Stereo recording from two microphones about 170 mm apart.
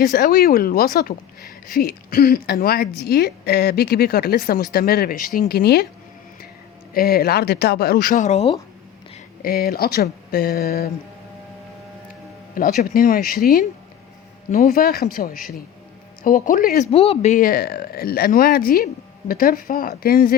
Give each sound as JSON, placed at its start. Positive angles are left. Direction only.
{"t": 0.0, "sound": "speech", "side_deg": 60}
{"t": 6.9, "sound": "speech", "side_deg": 65}
{"t": 9.4, "sound": "speech", "side_deg": 65}
{"t": 12.8, "sound": "speech", "side_deg": 60}
{"t": 14.5, "sound": "speech", "side_deg": 60}
{"t": 16.9, "sound": "speech", "side_deg": 35}